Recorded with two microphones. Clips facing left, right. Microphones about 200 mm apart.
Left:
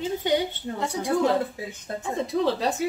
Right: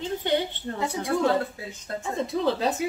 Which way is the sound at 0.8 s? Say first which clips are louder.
Left 1 dB; centre (ahead or behind).